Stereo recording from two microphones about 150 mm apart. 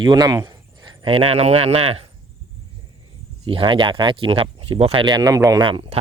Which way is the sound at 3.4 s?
35° right (ahead or behind).